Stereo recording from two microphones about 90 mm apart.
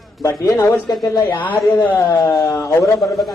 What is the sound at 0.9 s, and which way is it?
Speech, 45° left (ahead or behind).